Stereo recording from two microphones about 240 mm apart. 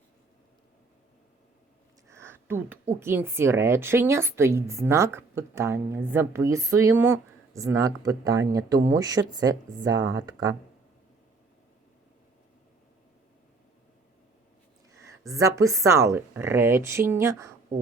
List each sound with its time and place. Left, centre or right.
2.0 s a sound: centre
3.0 s a woman's voice: centre
14.9 s a woman's voice: centre